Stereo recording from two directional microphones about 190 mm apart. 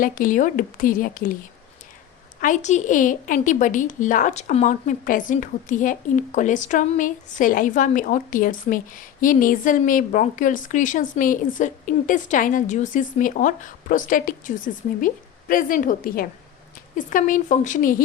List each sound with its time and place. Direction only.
0.0 s a woman's voice: 45° left (ahead or behind)
2.4 s a woman's voice: 40° left (ahead or behind)